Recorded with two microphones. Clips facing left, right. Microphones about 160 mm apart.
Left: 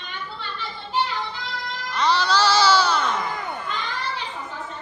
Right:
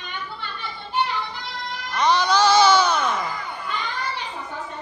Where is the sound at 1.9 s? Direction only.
15° right (ahead or behind).